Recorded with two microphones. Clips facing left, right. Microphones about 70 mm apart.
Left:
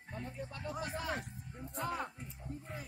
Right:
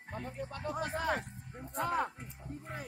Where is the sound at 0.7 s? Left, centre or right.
Right.